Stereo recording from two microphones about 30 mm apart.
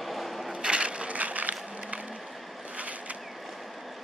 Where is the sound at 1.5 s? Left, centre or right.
Right.